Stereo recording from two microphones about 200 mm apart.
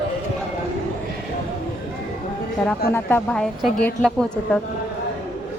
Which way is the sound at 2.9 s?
10° left (ahead or behind).